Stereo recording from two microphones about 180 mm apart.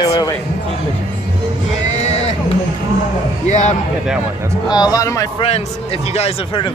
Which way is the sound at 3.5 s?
40° left (ahead or behind).